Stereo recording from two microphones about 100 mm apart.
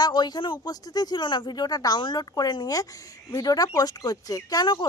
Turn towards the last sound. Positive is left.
turn(degrees=45)  # may be behind; listen again after turning